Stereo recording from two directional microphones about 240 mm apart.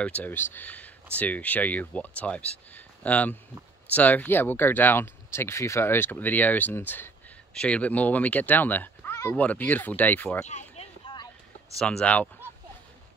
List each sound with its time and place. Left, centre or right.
0.0 s speech: centre
10.8 s a sound: centre
11.8 s speech: centre